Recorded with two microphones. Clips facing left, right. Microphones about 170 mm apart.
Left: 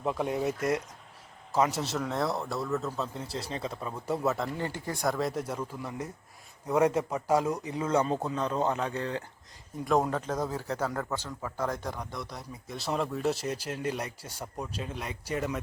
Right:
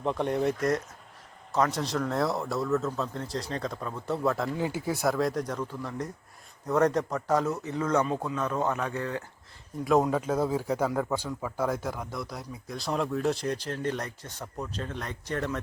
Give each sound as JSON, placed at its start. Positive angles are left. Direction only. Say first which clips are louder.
{"t": 0.0, "sound": "speech", "louder": "right 2 dB", "side_deg": 5}
{"t": 8.0, "sound": "a man's voice", "louder": "even", "side_deg": 35}
{"t": 8.4, "sound": "speech", "louder": "right 1 dB", "side_deg": 20}
{"t": 9.8, "sound": "speech", "louder": "right 3 dB", "side_deg": 0}